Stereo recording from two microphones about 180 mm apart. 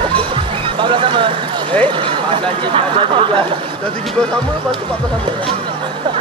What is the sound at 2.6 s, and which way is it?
Speech, 30° right (ahead or behind).